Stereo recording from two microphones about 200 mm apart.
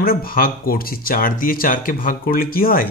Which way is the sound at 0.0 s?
45° left (ahead or behind).